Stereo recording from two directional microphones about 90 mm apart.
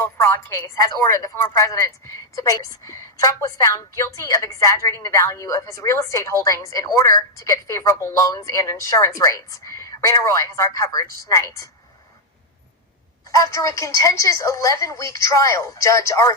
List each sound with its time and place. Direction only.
0.0 s a woman's voice: 30° left (ahead or behind)
0.8 s a woman's voice: 45° left (ahead or behind)
13.3 s a woman's voice: 35° left (ahead or behind)